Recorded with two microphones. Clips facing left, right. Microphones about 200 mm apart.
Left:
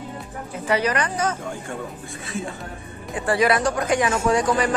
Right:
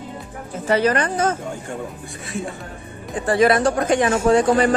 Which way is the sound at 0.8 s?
50° right (ahead or behind).